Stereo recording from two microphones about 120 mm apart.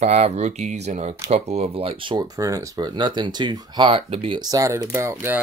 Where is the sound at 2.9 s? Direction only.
40° right (ahead or behind).